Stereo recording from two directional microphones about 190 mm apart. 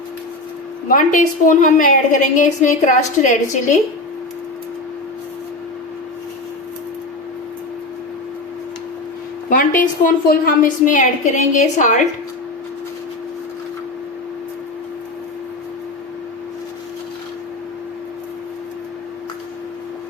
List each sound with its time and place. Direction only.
0.9 s a woman's voice: 45° left (ahead or behind)
9.5 s a woman's voice: 45° left (ahead or behind)